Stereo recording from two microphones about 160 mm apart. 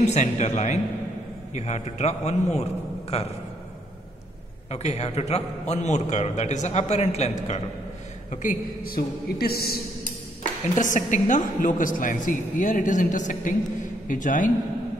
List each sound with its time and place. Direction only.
0.0 s a man's voice: 45° left (ahead or behind)
4.6 s a man's voice: 45° left (ahead or behind)
8.3 s a woman's voice: 55° left (ahead or behind); by 9.8 s 75° left (ahead or behind)
10.7 s a man's voice: 50° left (ahead or behind)